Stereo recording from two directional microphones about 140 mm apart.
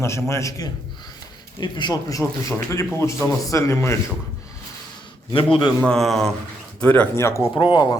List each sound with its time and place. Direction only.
0.0 s a man's voice: 20° left (ahead or behind)
5.3 s a man's voice: 40° left (ahead or behind)
5.8 s speech: 5° left (ahead or behind); by 7.6 s 20° left (ahead or behind)
7.6 s a man's voice: 30° left (ahead or behind)